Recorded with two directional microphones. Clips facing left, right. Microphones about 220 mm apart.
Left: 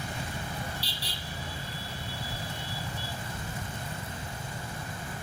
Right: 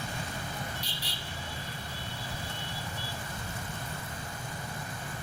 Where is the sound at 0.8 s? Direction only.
35° left (ahead or behind).